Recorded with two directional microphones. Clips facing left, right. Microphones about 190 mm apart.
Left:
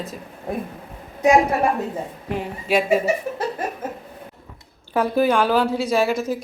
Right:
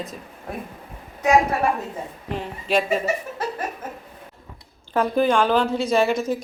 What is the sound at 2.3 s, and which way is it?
Speech, 10° left (ahead or behind).